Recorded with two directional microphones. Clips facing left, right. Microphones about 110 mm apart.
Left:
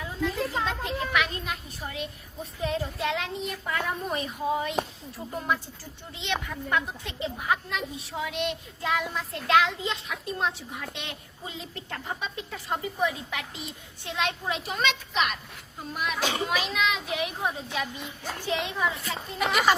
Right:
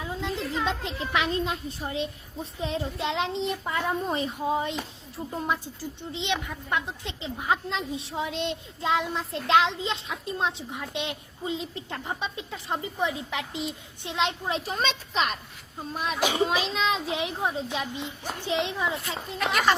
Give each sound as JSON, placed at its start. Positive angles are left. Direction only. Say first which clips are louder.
{"t": 0.0, "sound": "chatter", "louder": "left 1 dB", "side_deg": -20}
{"t": 0.6, "sound": "a child's voice", "louder": "even", "side_deg": -20}
{"t": 16.2, "sound": "a woman's voice", "louder": "right 5 dB", "side_deg": -20}